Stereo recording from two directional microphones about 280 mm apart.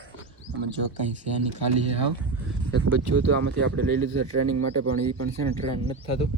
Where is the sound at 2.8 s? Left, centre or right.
Right.